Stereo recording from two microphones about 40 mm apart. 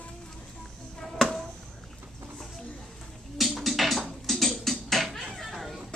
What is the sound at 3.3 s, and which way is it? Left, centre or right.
Music, centre.